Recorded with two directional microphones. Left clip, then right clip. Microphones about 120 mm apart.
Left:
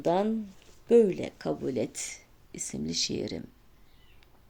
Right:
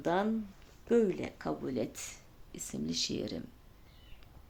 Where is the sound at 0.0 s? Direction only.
35° left (ahead or behind).